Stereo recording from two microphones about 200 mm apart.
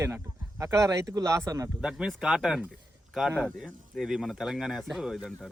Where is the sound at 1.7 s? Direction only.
5° right (ahead or behind).